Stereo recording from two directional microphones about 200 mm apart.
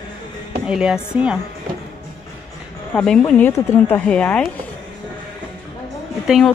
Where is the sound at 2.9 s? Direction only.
5° left (ahead or behind).